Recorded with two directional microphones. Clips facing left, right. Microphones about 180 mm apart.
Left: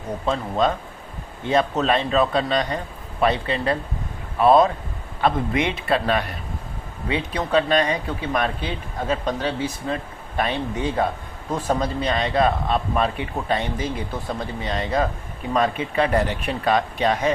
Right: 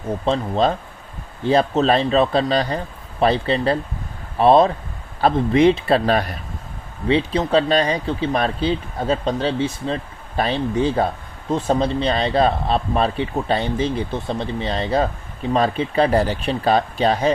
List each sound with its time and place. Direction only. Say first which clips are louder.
0.3 s speech: right 2 dB; 30° right (ahead or behind)